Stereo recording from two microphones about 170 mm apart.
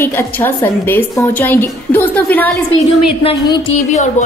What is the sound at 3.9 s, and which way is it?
Speech, 45° left (ahead or behind).